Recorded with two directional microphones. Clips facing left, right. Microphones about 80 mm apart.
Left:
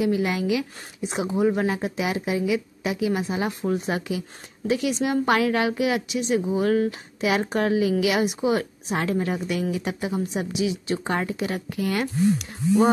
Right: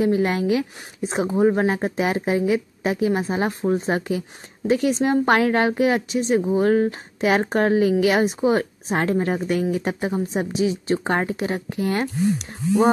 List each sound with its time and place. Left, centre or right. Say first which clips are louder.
0.0 s a woman's voice: right 3 dB; right